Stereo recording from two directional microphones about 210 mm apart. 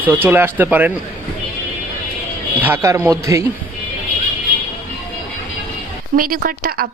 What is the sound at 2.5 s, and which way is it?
Speech, 10° right (ahead or behind).